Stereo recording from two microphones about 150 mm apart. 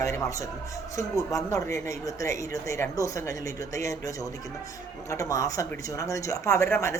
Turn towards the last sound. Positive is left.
turn(degrees=20)  # may be behind; listen again after turning